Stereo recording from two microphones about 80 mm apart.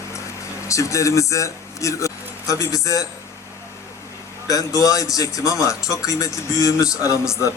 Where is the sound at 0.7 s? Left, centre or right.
Left.